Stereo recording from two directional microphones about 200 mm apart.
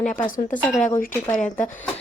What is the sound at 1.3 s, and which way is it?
Speech, 40° left (ahead or behind).